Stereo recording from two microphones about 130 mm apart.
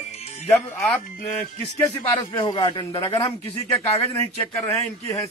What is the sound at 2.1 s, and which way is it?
A man's voice, 40° left (ahead or behind).